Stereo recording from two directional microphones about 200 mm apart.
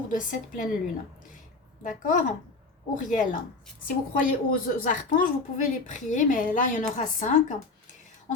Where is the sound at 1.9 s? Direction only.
40° left (ahead or behind).